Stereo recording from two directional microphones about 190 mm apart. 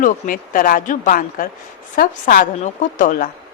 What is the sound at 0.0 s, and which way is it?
A woman's voice, 45° left (ahead or behind).